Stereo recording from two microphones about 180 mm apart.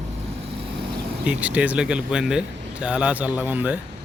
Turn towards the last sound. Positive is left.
turn(degrees=-10)  # may be behind; listen again after turning